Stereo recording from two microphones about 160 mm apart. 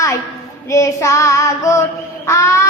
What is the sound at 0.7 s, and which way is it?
Child singing, 20° left (ahead or behind).